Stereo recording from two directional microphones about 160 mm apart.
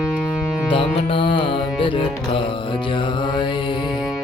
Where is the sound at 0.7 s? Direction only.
35° left (ahead or behind).